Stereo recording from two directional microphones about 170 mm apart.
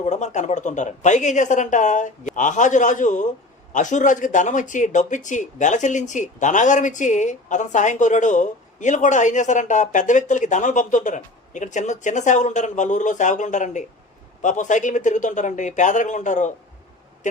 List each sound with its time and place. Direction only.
0.0 s speech: 45° left (ahead or behind)